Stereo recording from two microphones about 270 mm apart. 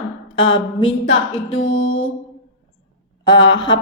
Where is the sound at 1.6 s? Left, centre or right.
Left.